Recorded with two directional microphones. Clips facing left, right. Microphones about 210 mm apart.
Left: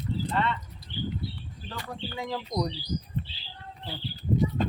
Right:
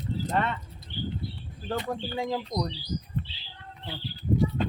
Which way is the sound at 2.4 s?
5° left (ahead or behind).